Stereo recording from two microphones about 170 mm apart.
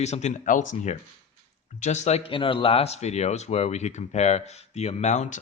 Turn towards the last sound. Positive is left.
turn(degrees=45)  # may be behind; listen again after turning